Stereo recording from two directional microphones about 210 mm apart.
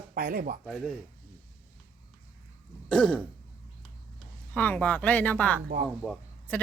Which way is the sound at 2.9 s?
5° left (ahead or behind).